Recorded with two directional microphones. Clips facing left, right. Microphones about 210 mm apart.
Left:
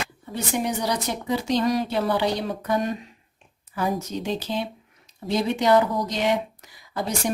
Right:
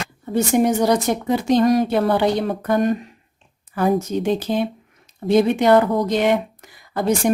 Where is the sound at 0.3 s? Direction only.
45° right (ahead or behind).